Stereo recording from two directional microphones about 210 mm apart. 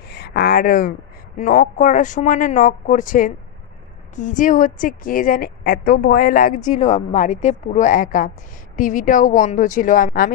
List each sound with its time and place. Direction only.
0.1 s a woman's voice: 50° left (ahead or behind)